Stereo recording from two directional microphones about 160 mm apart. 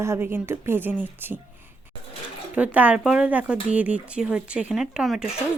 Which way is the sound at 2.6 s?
10° right (ahead or behind).